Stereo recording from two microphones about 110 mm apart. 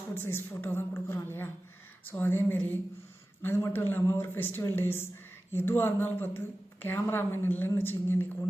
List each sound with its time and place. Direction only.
0.1 s speech: 20° left (ahead or behind)